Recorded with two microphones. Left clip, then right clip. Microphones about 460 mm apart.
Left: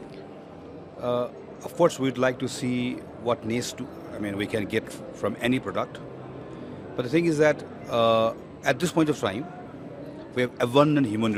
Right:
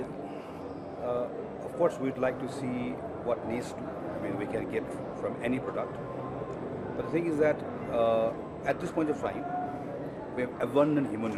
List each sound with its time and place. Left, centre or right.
1.8 s speech: left
7.1 s speech: left